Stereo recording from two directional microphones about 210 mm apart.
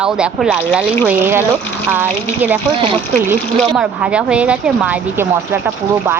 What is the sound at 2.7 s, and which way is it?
Speech, 25° right (ahead or behind).